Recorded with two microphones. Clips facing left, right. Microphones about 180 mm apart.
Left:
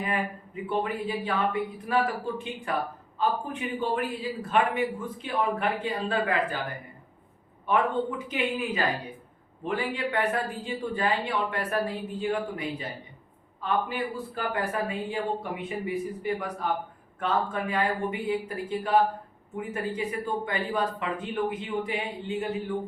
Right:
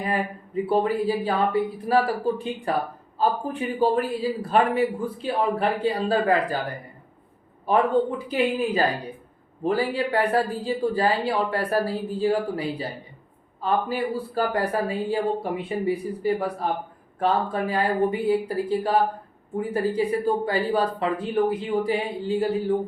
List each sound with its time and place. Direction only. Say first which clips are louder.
0.0 s a man's voice: right 4 dB; 35° right (ahead or behind)
8.2 s a man's voice: right 6 dB; 35° right (ahead or behind)